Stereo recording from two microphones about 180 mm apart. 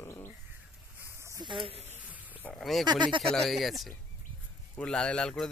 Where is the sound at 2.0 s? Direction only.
10° right (ahead or behind).